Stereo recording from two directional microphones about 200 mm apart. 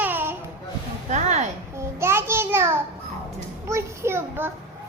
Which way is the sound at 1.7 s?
15° right (ahead or behind).